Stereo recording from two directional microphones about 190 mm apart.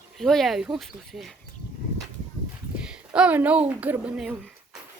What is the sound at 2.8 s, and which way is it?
Speech, 5° right (ahead or behind).